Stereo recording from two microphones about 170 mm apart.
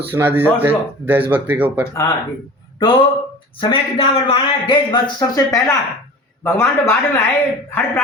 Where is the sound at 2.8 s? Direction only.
30° left (ahead or behind).